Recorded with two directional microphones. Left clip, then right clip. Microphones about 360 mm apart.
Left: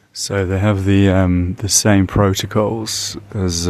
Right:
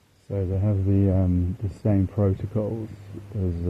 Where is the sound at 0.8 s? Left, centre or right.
Left.